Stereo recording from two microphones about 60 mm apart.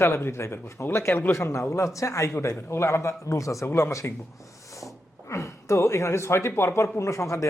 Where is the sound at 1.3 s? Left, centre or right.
Left.